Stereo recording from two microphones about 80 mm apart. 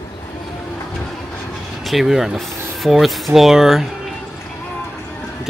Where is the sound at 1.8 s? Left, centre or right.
Centre.